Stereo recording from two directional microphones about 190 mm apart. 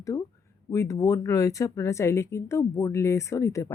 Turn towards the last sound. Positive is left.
turn(degrees=15)  # may be behind; listen again after turning